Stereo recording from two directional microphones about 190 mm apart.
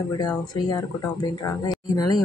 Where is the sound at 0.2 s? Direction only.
20° left (ahead or behind).